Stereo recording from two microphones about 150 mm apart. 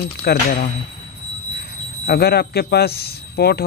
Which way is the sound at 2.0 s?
90° left.